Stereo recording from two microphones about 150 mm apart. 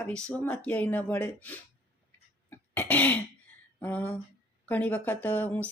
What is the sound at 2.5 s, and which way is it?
Cough, 10° left (ahead or behind).